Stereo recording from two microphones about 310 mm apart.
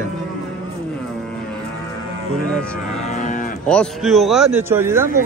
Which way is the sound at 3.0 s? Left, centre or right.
Left.